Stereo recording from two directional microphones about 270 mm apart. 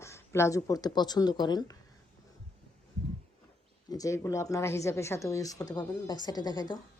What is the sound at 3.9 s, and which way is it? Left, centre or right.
A woman's voice, centre.